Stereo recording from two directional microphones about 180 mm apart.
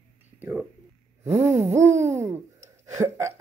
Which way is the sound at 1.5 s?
35° right (ahead or behind).